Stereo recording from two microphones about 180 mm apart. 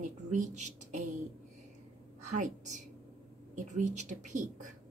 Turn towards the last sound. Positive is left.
turn(degrees=-45)  # may be behind; listen again after turning